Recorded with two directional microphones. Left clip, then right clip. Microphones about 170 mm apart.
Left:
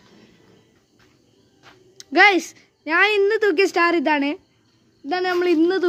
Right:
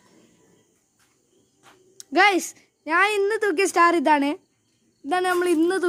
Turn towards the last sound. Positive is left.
turn(degrees=0)  # may be behind; listen again after turning